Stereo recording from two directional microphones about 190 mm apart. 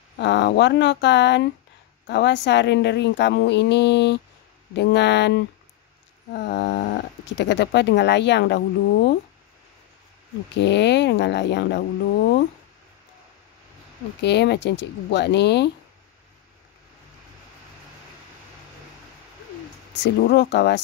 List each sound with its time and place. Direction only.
0.2 s speech: 65° left (ahead or behind)
10.5 s speech: 65° left (ahead or behind)
14.2 s speech: 65° left (ahead or behind)
20.0 s speech: 65° left (ahead or behind)